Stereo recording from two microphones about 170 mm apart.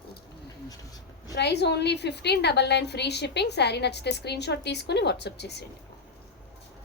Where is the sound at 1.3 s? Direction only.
85° left.